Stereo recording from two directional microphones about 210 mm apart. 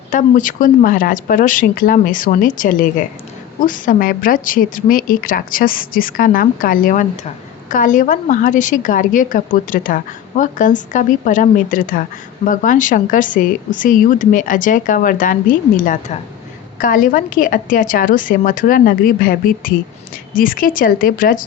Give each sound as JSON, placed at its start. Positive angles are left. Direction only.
{"t": 0.1, "sound": "a woman's voice", "side_deg": 40}